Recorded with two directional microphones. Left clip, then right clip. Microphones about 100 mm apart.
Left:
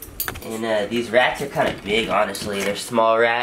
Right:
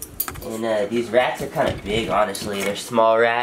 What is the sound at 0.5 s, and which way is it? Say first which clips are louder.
Speech: even; centre (ahead or behind).